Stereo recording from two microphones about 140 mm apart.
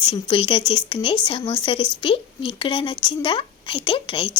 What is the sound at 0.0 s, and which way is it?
A woman's voice, 35° left (ahead or behind).